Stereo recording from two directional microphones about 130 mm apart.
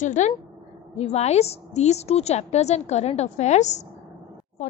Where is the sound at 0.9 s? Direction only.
55° left (ahead or behind).